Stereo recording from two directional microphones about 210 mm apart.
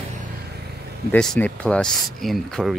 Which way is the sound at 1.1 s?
5° left (ahead or behind).